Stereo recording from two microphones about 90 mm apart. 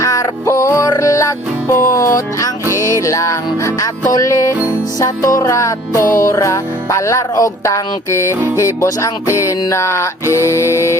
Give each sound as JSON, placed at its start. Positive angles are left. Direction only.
{"t": 0.0, "sound": "music", "side_deg": 35}